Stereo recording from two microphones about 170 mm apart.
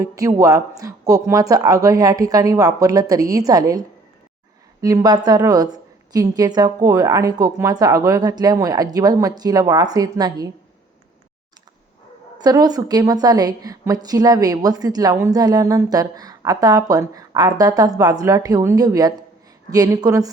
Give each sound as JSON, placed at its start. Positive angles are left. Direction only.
{"t": 0.0, "sound": "a woman's voice", "side_deg": -20}
{"t": 12.4, "sound": "a woman's voice", "side_deg": -25}